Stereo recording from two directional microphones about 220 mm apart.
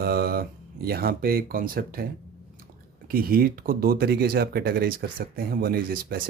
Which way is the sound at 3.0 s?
40° right (ahead or behind).